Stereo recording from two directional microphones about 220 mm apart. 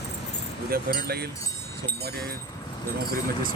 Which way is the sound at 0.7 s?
45° right (ahead or behind).